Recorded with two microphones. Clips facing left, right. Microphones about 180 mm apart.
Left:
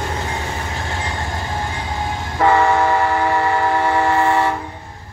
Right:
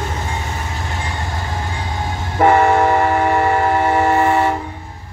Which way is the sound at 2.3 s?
20° right (ahead or behind).